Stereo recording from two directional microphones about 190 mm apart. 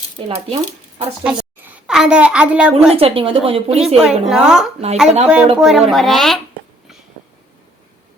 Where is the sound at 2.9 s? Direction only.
30° right (ahead or behind).